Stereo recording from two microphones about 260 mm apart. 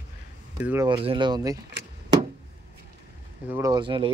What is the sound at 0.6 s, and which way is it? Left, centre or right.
Speech, centre.